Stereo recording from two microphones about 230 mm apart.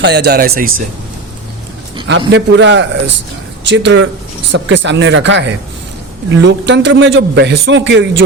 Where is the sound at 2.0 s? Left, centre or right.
Right.